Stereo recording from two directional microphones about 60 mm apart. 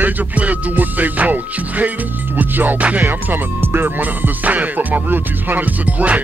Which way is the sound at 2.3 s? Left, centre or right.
Right.